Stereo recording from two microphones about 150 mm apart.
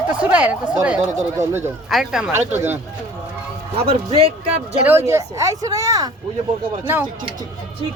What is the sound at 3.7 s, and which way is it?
Speech, 40° right (ahead or behind).